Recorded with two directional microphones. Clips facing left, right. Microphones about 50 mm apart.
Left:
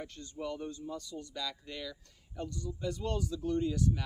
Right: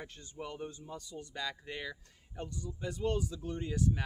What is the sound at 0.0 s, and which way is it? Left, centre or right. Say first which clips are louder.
Speech: left 4 dB; centre.